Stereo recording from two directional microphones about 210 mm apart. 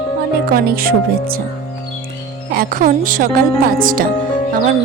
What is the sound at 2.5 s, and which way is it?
Speech, 40° right (ahead or behind).